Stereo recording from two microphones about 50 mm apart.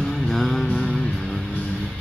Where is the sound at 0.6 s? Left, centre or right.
Centre.